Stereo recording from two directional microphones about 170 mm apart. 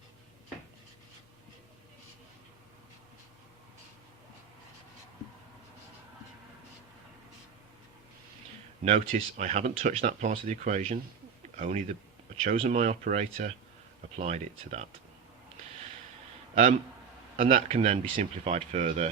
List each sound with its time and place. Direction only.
8.8 s speech: 45° right (ahead or behind)
17.3 s a man's voice: 55° right (ahead or behind)
17.7 s speech: 35° right (ahead or behind)